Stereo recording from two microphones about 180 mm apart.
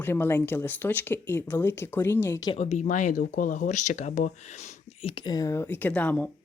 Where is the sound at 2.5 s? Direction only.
35° left (ahead or behind).